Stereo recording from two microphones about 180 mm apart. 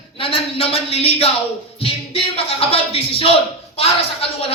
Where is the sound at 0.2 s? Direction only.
30° left (ahead or behind).